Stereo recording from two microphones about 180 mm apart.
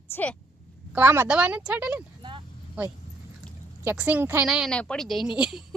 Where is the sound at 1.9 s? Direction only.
25° right (ahead or behind).